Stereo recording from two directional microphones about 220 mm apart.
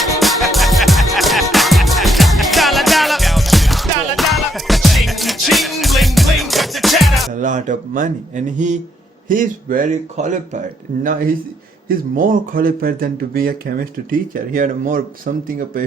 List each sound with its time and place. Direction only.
0.0 s music: centre (ahead or behind)
7.3 s a sound: 35° right (ahead or behind)
9.3 s speech: 40° right (ahead or behind)